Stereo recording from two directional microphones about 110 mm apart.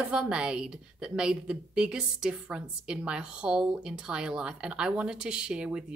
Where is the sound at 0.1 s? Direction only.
10° right (ahead or behind).